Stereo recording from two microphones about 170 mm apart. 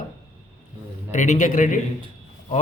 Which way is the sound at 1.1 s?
45° left (ahead or behind).